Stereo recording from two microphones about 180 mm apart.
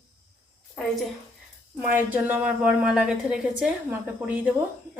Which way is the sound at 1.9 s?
10° right (ahead or behind).